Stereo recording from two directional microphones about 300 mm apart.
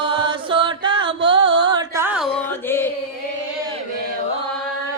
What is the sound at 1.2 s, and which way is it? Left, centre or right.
Music, centre.